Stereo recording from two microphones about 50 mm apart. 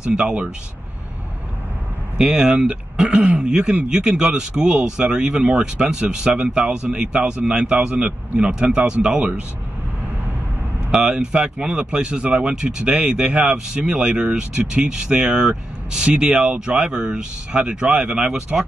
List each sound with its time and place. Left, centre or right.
0.0 s speech: centre
2.1 s speech: centre
11.1 s speech: centre
16.1 s speech: right